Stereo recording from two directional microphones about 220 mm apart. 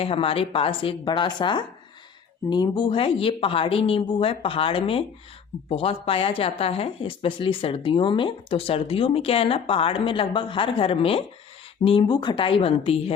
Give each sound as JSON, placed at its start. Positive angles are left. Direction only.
{"t": 0.0, "sound": "speech", "side_deg": 25}